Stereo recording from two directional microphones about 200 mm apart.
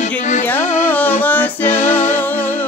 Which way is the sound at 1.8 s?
40° left (ahead or behind).